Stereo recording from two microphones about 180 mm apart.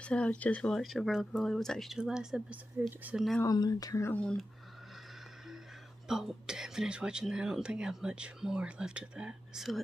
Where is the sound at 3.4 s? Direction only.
20° left (ahead or behind).